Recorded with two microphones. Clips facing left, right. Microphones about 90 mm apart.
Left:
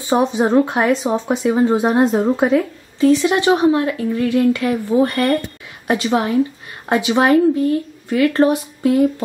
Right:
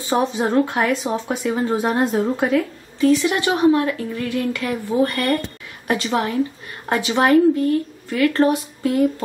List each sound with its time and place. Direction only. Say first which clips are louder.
0.1 s speech: left 4 dB; 15° left (ahead or behind)